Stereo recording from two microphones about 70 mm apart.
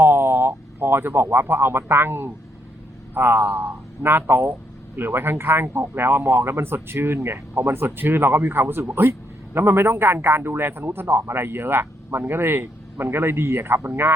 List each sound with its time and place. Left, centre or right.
0.0 s speech: right